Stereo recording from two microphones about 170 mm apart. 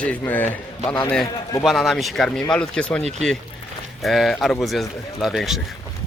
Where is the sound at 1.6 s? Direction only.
Centre (ahead or behind).